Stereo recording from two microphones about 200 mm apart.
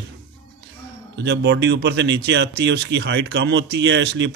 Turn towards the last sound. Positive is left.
turn(degrees=-60)  # may be behind; listen again after turning